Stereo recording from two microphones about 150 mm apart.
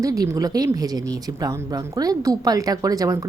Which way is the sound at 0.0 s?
20° right (ahead or behind).